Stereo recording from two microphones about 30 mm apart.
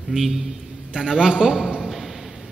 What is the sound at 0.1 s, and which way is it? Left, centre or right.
Speech, centre.